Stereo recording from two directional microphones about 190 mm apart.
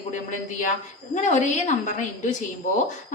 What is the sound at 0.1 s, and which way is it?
A woman's voice, 40° left (ahead or behind).